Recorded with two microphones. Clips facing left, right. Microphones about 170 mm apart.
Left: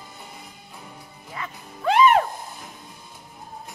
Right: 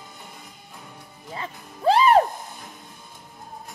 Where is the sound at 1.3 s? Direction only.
30° right (ahead or behind).